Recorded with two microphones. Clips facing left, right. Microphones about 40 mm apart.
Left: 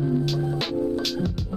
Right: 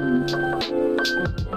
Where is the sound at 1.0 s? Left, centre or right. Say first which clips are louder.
Right 4 dB; centre.